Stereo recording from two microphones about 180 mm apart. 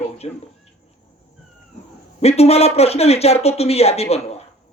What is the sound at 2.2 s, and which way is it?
A man's voice, 35° left (ahead or behind).